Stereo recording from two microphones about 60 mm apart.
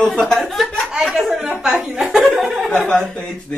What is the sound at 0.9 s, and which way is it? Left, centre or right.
Speech, centre.